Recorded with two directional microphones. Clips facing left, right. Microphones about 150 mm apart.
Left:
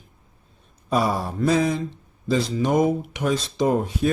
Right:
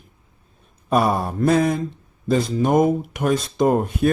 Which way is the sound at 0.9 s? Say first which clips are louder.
Right 3 dB; 55° right (ahead or behind).